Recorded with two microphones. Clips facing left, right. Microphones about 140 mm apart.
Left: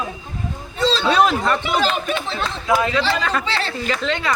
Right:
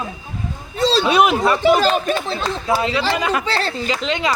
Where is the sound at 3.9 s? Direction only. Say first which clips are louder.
Left 1 dB; 15° right (ahead or behind).